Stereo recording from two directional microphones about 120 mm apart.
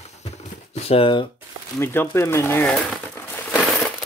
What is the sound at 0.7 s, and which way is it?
Speech, 55° left (ahead or behind).